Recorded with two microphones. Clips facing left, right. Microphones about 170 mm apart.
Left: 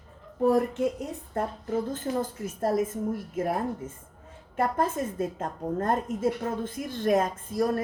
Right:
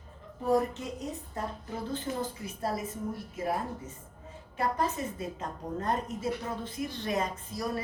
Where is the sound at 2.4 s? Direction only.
50° left (ahead or behind).